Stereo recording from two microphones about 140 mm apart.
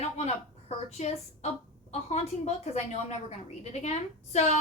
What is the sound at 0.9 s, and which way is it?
A woman's voice, 55° left (ahead or behind).